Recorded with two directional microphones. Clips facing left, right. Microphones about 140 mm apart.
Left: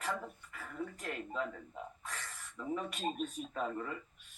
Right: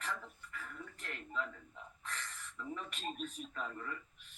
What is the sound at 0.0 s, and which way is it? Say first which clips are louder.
Speech: left 5 dB; 40° left (ahead or behind).